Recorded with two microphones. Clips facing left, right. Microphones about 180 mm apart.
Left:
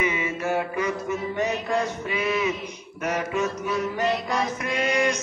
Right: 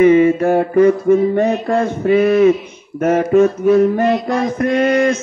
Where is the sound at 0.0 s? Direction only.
45° right (ahead or behind).